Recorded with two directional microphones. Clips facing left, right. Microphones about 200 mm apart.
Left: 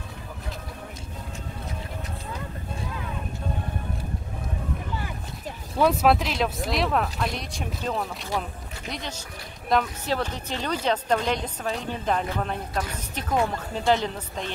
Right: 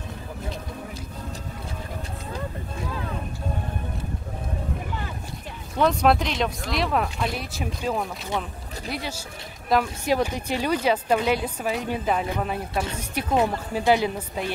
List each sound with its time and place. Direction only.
5.8 s a woman's voice: 5° left (ahead or behind)